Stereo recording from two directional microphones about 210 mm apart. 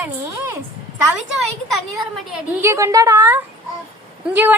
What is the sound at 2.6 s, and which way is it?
A woman's voice, 15° right (ahead or behind).